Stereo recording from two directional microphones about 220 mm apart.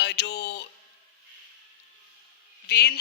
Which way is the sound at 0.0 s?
50° left (ahead or behind).